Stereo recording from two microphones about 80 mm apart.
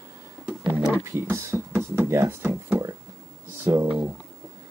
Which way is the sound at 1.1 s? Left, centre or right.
Right.